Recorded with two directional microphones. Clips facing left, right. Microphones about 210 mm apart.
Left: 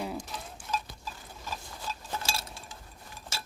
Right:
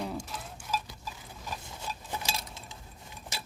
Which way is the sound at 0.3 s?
5° right (ahead or behind).